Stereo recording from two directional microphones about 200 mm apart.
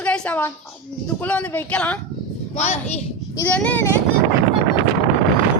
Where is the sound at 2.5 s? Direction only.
35° left (ahead or behind).